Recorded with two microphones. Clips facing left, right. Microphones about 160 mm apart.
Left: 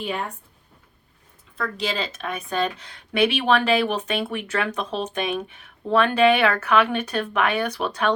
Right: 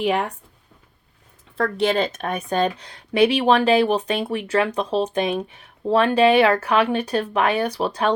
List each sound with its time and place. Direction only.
0.0 s speech: 85° right
1.5 s speech: 65° right (ahead or behind); by 8.1 s 35° right (ahead or behind)